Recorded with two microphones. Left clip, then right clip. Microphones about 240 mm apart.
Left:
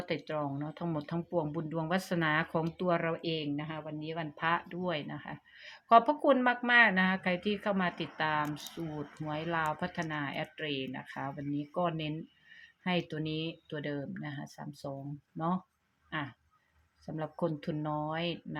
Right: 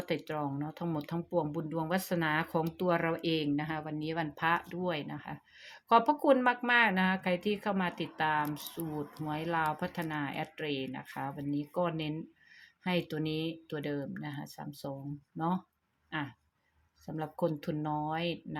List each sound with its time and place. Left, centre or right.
0.0 s speech: centre